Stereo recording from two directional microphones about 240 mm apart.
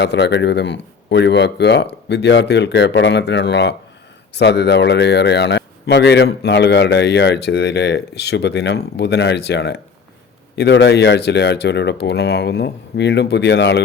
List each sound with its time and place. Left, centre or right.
0.0 s speech: left